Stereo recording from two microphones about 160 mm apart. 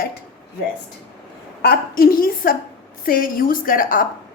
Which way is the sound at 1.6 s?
80° left.